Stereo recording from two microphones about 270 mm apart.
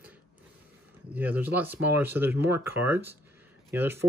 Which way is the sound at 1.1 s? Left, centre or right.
Centre.